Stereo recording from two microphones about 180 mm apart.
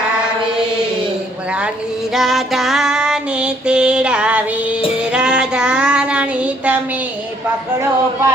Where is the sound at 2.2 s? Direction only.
Centre (ahead or behind).